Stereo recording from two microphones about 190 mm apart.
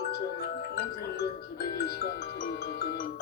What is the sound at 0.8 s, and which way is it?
Music, 55° left (ahead or behind).